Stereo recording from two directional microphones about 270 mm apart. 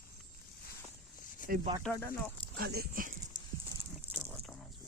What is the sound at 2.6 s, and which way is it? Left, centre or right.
Speech, right.